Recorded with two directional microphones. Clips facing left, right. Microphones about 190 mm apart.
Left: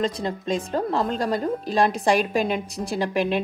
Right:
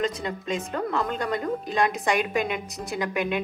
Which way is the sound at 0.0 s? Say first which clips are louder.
Left 3 dB; 30° left (ahead or behind).